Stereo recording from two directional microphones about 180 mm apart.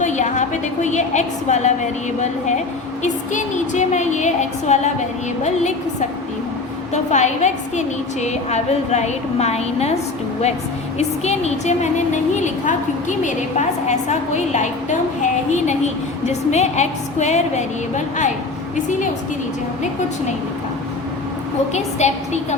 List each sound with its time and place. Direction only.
0.0 s a woman's voice: 40° left (ahead or behind)
6.9 s a woman's voice: 40° left (ahead or behind)
21.7 s a woman's voice: 40° left (ahead or behind)